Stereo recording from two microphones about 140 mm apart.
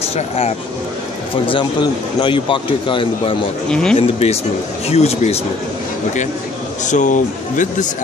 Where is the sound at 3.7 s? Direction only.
5° left (ahead or behind).